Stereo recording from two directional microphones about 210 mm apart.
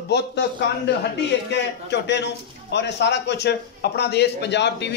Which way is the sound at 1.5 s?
55° left (ahead or behind).